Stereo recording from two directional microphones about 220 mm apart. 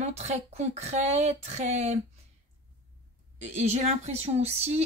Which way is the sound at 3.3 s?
30° right (ahead or behind).